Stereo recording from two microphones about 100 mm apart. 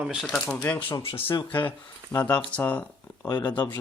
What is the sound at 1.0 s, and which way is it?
Speech, 65° left (ahead or behind).